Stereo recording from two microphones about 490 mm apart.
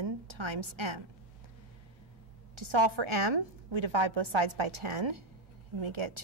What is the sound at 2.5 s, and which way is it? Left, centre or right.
A woman's voice, right.